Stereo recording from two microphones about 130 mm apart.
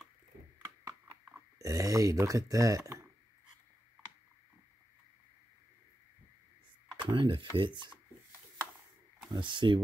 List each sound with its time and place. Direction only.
1.6 s speech: 25° right (ahead or behind)
7.0 s chopping: 40° right (ahead or behind)
7.5 s speech: 40° right (ahead or behind)
9.3 s speech: 40° right (ahead or behind)